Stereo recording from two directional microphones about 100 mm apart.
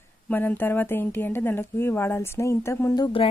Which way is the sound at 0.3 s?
20° left (ahead or behind).